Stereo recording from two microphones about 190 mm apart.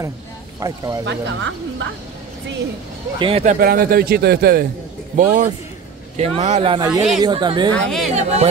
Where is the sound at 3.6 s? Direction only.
50° right (ahead or behind).